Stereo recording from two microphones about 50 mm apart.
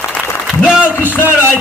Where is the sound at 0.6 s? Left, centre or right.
Right.